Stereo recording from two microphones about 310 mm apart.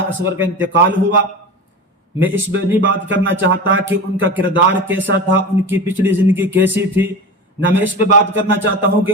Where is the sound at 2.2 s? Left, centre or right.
Right.